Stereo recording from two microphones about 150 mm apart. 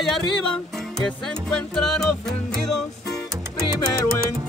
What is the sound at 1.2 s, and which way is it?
Speech, 5° left (ahead or behind).